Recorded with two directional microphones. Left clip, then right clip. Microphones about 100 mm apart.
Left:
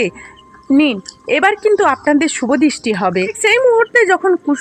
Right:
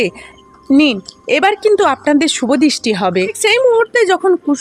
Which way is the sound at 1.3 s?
45° right (ahead or behind).